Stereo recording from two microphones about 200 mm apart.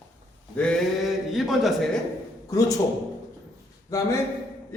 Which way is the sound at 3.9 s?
15° left (ahead or behind).